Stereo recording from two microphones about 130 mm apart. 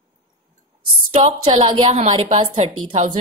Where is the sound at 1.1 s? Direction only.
50° right (ahead or behind).